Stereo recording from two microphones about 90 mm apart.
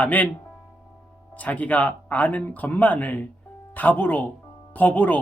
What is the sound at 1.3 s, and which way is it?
Speech, 15° left (ahead or behind).